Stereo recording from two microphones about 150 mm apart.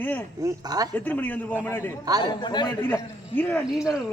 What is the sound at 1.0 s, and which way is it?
A man's voice, 10° left (ahead or behind).